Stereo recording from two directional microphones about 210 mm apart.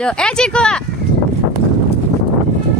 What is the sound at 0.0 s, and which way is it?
Speech, 5° left (ahead or behind).